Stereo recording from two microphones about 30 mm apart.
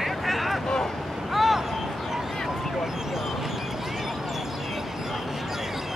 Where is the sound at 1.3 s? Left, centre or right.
Centre.